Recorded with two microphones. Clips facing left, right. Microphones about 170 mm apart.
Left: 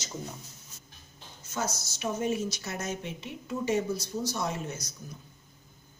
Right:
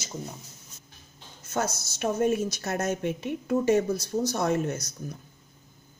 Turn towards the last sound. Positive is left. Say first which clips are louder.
# right 7 dB
turn(degrees=-55)  # may be behind; listen again after turning